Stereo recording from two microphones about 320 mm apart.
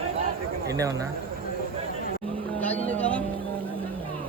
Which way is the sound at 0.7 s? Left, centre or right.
Centre.